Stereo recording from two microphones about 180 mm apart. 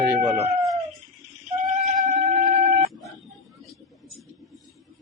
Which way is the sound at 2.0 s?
40° right (ahead or behind).